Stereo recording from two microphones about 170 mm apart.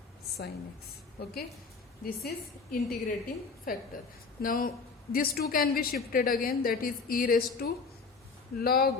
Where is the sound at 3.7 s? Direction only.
55° left (ahead or behind).